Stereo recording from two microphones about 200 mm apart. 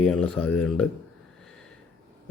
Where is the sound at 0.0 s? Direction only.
5° left (ahead or behind).